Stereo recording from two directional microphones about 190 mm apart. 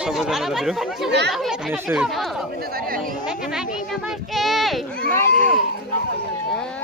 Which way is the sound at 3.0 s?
5° right (ahead or behind).